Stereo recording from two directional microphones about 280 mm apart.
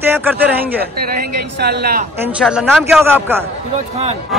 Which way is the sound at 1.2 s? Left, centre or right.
Right.